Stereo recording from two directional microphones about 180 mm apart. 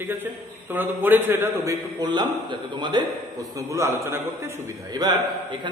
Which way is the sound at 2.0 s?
25° right (ahead or behind).